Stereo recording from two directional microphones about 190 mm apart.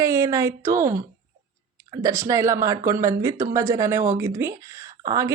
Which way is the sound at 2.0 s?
15° right (ahead or behind).